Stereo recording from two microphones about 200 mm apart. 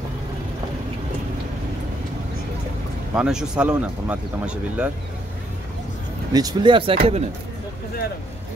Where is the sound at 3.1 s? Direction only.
5° right (ahead or behind).